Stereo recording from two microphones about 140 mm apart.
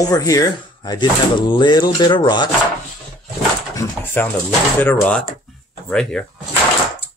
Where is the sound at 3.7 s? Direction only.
20° left (ahead or behind).